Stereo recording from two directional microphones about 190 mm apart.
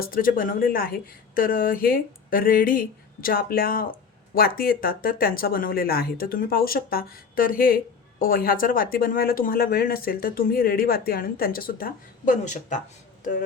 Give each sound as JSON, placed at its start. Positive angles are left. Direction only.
{"t": 0.0, "sound": "speech", "side_deg": 50}